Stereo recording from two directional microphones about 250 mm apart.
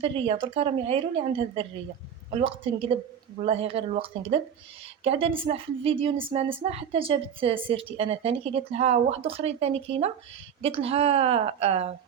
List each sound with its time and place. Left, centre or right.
0.0 s a woman's voice: right